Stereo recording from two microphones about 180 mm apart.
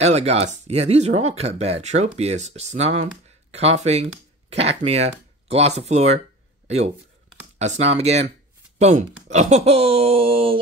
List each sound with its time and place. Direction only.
0.0 s speech: 35° right (ahead or behind)
7.5 s speech: 40° right (ahead or behind)